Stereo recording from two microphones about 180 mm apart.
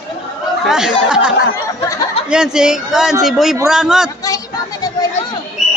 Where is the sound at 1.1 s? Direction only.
5° right (ahead or behind).